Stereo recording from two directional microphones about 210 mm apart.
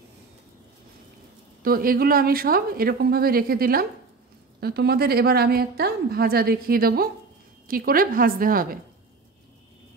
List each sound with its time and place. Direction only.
1.6 s a woman's voice: 45° right (ahead or behind)